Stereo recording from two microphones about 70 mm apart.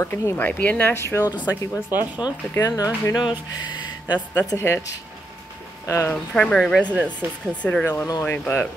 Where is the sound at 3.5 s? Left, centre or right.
Left.